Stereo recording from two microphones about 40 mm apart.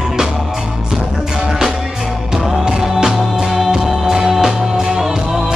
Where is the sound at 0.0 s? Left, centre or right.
Centre.